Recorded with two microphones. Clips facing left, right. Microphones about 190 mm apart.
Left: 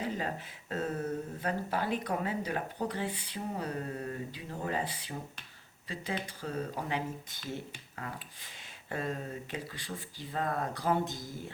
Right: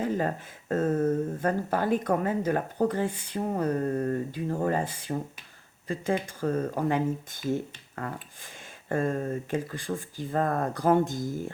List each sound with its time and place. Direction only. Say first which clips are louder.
0.0 s speech: right 7 dB; 50° right (ahead or behind)